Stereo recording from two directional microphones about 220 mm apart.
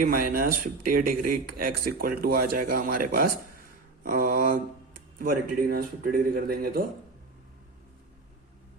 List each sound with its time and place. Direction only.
0.0 s speech: 40° right (ahead or behind)